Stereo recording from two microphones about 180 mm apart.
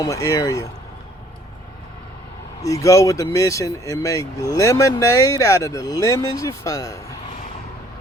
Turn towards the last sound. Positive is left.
turn(degrees=20)  # may be behind; listen again after turning